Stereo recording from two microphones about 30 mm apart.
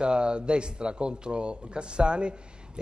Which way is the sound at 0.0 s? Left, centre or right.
Right.